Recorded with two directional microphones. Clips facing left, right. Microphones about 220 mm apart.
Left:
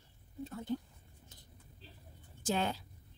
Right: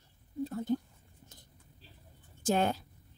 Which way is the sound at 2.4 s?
50° right (ahead or behind).